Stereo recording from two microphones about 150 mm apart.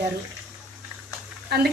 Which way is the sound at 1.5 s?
90° right.